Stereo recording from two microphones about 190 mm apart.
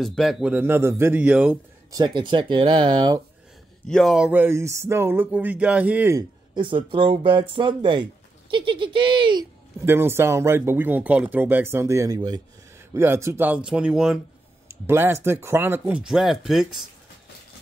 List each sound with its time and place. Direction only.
0.0 s speech: centre (ahead or behind)
1.9 s speech: 20° right (ahead or behind)
3.8 s speech: centre (ahead or behind)
6.5 s speech: 25° right (ahead or behind)
9.8 s speech: 10° right (ahead or behind)